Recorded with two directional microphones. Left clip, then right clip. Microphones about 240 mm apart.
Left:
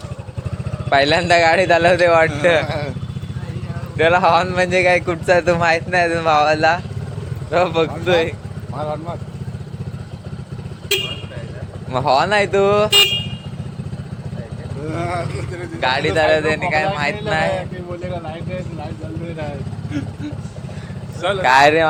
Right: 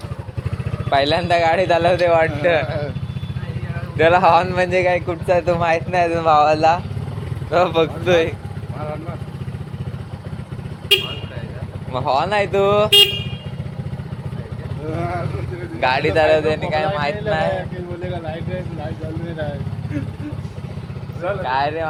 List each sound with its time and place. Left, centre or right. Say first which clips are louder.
0.9 s speech: left 3 dB; centre
3.9 s speech: right 1 dB; centre
11.9 s speech: left 3 dB; centre
15.8 s speech: even; centre
21.2 s speech: left 8 dB; left